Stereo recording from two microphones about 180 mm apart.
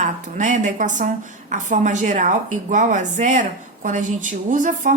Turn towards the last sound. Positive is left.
turn(degrees=-45)  # may be behind; listen again after turning